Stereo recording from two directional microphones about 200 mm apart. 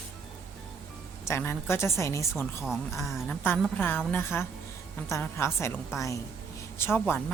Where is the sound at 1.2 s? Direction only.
10° left (ahead or behind).